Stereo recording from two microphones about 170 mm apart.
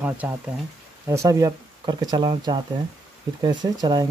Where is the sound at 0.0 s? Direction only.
10° right (ahead or behind).